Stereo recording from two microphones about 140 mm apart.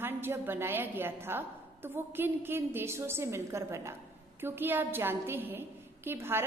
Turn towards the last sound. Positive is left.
turn(degrees=-15)  # may be behind; listen again after turning